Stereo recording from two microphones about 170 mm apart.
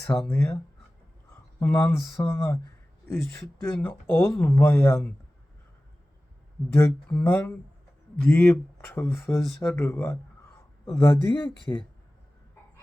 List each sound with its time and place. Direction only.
0.2 s speech: 10° left (ahead or behind)
7.1 s speech: 5° left (ahead or behind)